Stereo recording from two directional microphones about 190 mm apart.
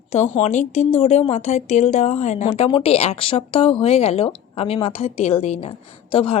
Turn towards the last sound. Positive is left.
turn(degrees=30)  # may be behind; listen again after turning